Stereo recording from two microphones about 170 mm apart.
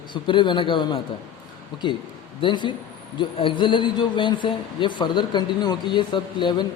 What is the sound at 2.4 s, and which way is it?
Speech, 30° left (ahead or behind).